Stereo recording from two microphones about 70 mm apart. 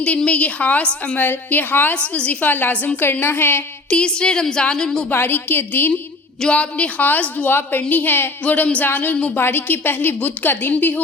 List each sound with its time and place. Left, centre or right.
0.3 s a woman's voice: centre
1.2 s a woman's voice: left
2.0 s a woman's voice: centre; by 3.6 s left
3.8 s a woman's voice: centre
5.0 s a woman's voice: left
6.4 s a woman's voice: centre